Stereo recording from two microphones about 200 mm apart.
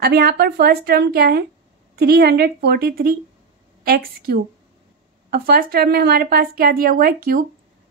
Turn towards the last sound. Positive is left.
turn(degrees=-45)  # may be behind; listen again after turning